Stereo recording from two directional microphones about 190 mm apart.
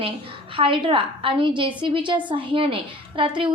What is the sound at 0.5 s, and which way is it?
A woman's voice, 25° right (ahead or behind).